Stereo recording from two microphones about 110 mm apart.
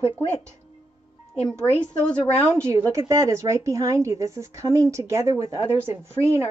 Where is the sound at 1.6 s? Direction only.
10° left (ahead or behind).